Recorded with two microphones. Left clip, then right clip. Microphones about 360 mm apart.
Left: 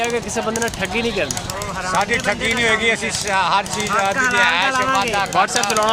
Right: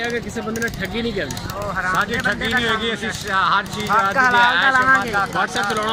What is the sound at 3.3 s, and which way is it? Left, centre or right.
Speech, centre.